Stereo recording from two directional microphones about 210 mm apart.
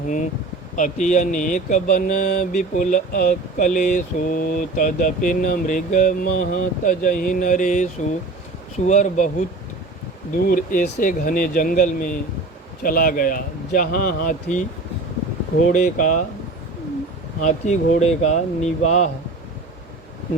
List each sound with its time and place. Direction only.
0.8 s speech: 35° left (ahead or behind)
10.3 s speech: 40° left (ahead or behind)
15.7 s speech: 40° left (ahead or behind)
17.4 s speech: 35° left (ahead or behind)